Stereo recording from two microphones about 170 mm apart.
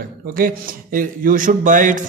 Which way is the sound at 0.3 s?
55° right (ahead or behind).